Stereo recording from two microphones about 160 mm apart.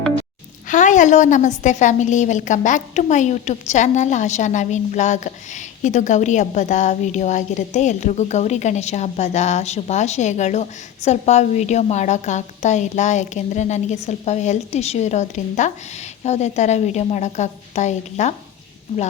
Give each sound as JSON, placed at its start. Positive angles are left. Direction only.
{"t": 0.7, "sound": "a woman's voice", "side_deg": 50}